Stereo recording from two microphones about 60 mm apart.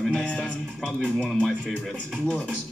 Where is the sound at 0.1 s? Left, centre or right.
Centre.